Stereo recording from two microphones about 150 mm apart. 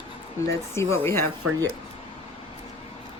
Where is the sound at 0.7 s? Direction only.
20° left (ahead or behind).